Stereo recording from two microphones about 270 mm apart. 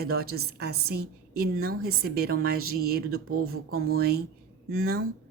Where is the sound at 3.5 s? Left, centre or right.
Right.